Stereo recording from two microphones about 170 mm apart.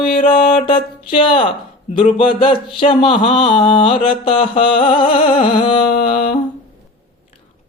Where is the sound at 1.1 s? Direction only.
30° left (ahead or behind).